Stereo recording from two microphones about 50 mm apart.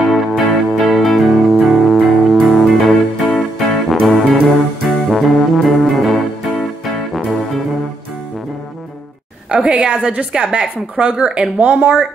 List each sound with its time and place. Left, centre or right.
0.4 s music: centre
7.2 s brass instrument: centre
9.5 s a woman's voice: right